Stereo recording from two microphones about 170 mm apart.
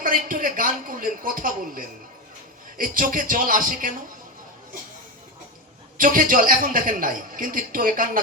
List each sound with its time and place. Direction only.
0.0 s a man's voice: 55° right (ahead or behind)
6.0 s a man's voice: 55° right (ahead or behind)